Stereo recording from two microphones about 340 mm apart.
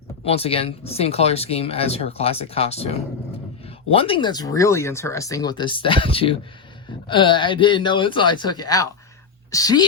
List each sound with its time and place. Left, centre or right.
0.3 s speech: centre